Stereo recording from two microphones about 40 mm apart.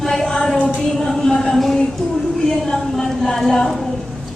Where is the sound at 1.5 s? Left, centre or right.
Centre.